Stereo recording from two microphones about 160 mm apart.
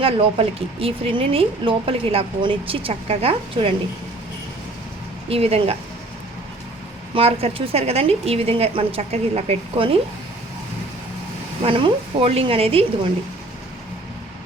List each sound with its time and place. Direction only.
0.0 s speech: 35° right (ahead or behind)
5.3 s speech: 40° right (ahead or behind)
7.1 s speech: 35° right (ahead or behind)
11.6 s speech: 35° right (ahead or behind)